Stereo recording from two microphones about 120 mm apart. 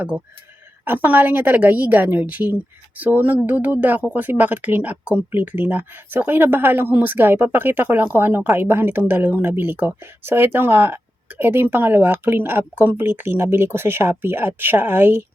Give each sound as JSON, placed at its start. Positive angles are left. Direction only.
{"t": 0.9, "sound": "speech", "side_deg": -15}